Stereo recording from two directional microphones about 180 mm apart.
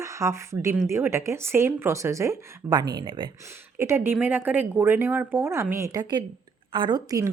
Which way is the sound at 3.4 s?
15° right (ahead or behind).